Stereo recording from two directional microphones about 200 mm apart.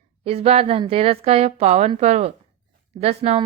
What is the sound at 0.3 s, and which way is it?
A woman's voice, 30° right (ahead or behind).